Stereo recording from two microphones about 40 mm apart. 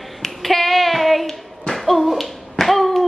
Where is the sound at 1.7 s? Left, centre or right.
Centre.